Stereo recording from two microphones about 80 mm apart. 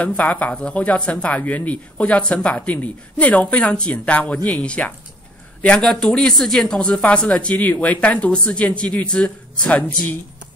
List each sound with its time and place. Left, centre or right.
0.0 s speech: centre